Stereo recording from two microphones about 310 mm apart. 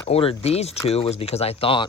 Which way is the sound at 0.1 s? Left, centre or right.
Centre.